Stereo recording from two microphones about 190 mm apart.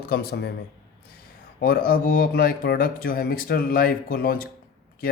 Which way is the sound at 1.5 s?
50° left (ahead or behind).